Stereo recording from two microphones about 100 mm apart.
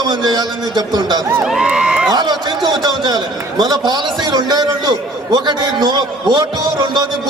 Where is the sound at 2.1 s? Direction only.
45° right (ahead or behind).